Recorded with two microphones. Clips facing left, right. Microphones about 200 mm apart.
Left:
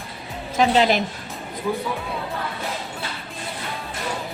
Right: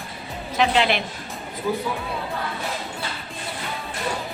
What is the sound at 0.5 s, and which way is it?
Speech, 40° left (ahead or behind).